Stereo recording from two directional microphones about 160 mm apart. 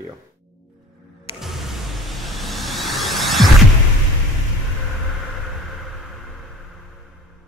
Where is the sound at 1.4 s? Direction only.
Centre (ahead or behind).